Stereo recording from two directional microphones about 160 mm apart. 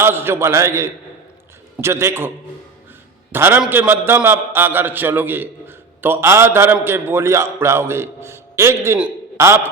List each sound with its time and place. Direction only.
0.0 s a man's voice: 15° right (ahead or behind)
3.3 s a man's voice: 15° right (ahead or behind)